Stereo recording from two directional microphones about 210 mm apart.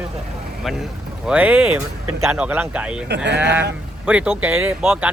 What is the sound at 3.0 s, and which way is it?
Speech, 55° right (ahead or behind).